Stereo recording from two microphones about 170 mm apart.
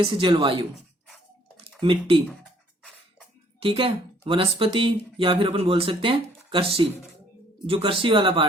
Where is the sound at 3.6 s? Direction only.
35° right (ahead or behind).